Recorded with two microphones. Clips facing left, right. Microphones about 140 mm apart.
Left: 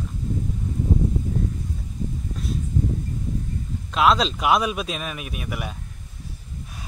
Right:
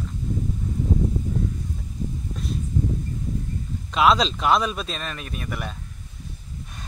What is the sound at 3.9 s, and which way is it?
Speech, centre (ahead or behind).